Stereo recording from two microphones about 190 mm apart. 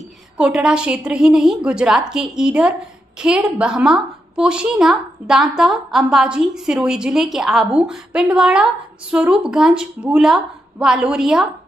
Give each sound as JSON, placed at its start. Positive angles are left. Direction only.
{"t": 0.4, "sound": "a woman's voice", "side_deg": -5}